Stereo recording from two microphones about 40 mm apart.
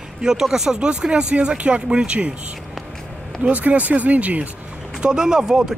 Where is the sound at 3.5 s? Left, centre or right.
Right.